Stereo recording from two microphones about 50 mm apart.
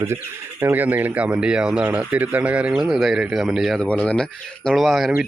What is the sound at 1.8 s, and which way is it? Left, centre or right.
Speech, right.